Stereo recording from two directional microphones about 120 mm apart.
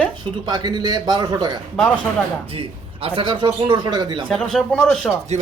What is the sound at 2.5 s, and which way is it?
A man's voice, 50° right (ahead or behind).